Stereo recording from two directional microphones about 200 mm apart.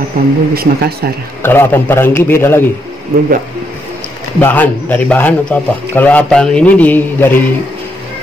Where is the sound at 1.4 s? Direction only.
10° left (ahead or behind).